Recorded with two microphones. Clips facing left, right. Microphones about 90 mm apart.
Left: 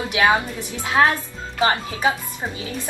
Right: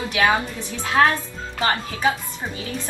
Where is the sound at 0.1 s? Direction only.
15° left (ahead or behind).